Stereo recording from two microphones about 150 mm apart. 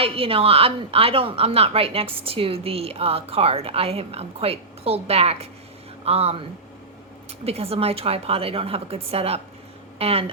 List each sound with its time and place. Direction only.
0.0 s a woman's voice: 40° right (ahead or behind)
7.4 s a woman's voice: 40° right (ahead or behind)